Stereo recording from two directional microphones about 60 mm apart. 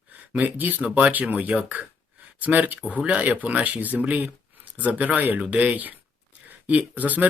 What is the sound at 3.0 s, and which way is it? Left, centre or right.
Speech, centre.